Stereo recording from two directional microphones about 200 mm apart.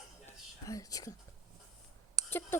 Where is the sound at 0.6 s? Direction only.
15° left (ahead or behind).